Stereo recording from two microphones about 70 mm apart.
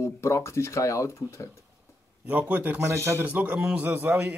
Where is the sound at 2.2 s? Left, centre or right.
Right.